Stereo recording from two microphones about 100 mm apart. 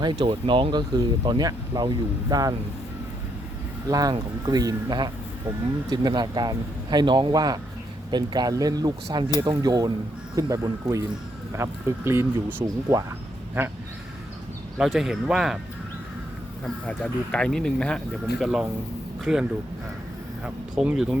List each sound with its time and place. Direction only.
0.0 s speech: 50° right (ahead or behind)
3.8 s speech: 40° right (ahead or behind); by 12.6 s 25° right (ahead or behind)
12.6 s speech: 35° right (ahead or behind)
14.8 s speech: 5° right (ahead or behind)
16.6 s speech: 10° left (ahead or behind); by 21.2 s 5° right (ahead or behind)